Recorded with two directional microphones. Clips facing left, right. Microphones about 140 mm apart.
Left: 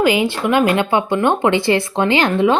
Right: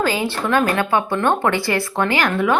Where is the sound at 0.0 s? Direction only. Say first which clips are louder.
Left 5 dB; 15° left (ahead or behind).